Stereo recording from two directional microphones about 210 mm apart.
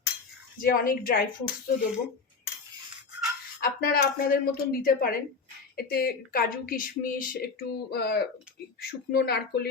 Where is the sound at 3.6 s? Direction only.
45° left (ahead or behind).